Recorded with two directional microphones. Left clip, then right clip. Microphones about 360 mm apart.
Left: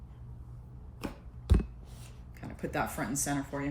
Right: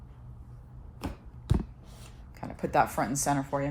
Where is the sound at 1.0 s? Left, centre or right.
Centre.